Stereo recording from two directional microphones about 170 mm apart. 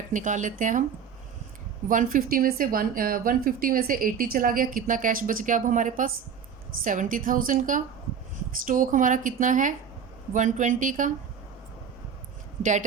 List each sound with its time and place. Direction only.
0.1 s speech: 50° right (ahead or behind)
1.9 s speech: 50° right (ahead or behind)